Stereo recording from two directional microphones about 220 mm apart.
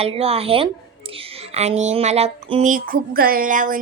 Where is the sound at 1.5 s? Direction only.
30° right (ahead or behind).